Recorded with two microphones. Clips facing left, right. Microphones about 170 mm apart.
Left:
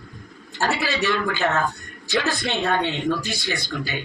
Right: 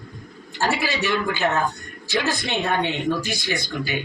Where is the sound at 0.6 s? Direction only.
15° right (ahead or behind).